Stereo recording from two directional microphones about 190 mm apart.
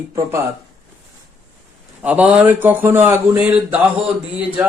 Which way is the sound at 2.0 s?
5° right (ahead or behind).